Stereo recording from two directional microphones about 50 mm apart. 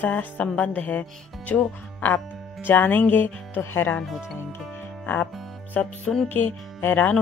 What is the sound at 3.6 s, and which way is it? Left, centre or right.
Speech, left.